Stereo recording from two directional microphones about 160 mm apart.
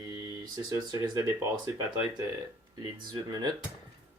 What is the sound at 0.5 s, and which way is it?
Speech, 20° right (ahead or behind).